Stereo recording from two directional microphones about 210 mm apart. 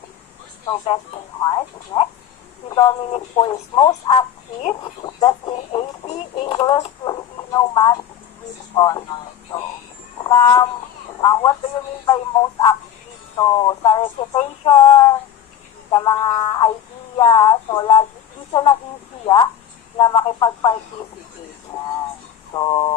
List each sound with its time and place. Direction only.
0.6 s speech: 25° left (ahead or behind)
10.2 s speech: 15° left (ahead or behind)
19.2 s speech: 20° left (ahead or behind)
22.5 s speech: 20° left (ahead or behind)